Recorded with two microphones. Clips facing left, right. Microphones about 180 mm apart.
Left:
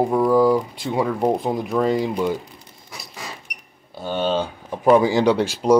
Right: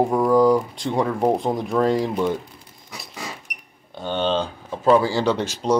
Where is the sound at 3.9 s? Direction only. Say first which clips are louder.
Even; 5° left (ahead or behind).